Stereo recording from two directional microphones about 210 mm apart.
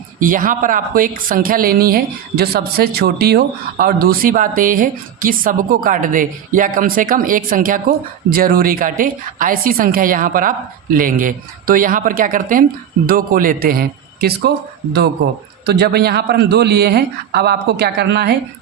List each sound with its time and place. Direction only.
0.2 s a woman's voice: 40° right (ahead or behind)
15.6 s a man's voice: 50° right (ahead or behind)